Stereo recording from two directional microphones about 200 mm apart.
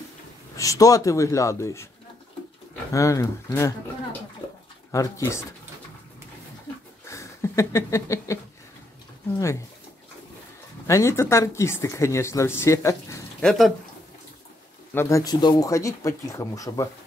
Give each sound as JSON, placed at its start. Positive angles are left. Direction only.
{"t": 0.6, "sound": "speech", "side_deg": 15}
{"t": 2.9, "sound": "speech", "side_deg": 15}
{"t": 4.9, "sound": "speech", "side_deg": 15}
{"t": 7.1, "sound": "a sound", "side_deg": 15}
{"t": 10.9, "sound": "speech", "side_deg": 15}
{"t": 13.4, "sound": "speech", "side_deg": 0}
{"t": 15.0, "sound": "speech", "side_deg": 15}